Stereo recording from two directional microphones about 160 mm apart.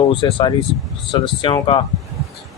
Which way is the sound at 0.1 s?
30° left (ahead or behind).